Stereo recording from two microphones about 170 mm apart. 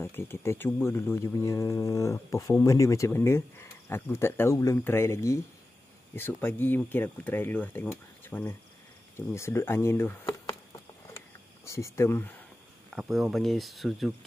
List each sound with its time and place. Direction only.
0.0 s speech: 15° left (ahead or behind)
11.6 s speech: 15° left (ahead or behind)
12.9 s speech: centre (ahead or behind)